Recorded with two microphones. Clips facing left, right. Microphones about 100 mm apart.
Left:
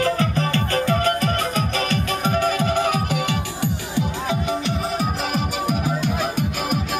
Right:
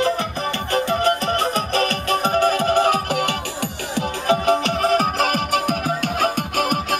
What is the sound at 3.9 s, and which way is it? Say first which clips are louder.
Music: right 5 dB; 65° right (ahead or behind).